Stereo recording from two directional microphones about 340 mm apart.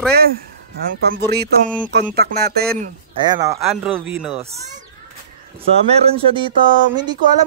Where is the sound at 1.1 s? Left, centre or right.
Right.